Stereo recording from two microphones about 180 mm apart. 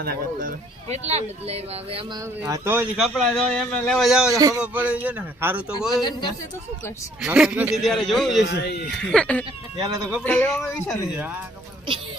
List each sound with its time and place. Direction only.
0.0 s speech: 55° right (ahead or behind); by 2.3 s 25° right (ahead or behind)
2.4 s speech: 15° right (ahead or behind)
4.3 s speech: 20° right (ahead or behind)
4.6 s speech: 10° right (ahead or behind)
6.0 s speech: 25° left (ahead or behind)
7.2 s speech: 5° right (ahead or behind)
8.4 s speech: 70° left (ahead or behind)
9.0 s speech: 5° left (ahead or behind)
9.7 s speech: 20° right (ahead or behind)
10.2 s speech: 10° left (ahead or behind)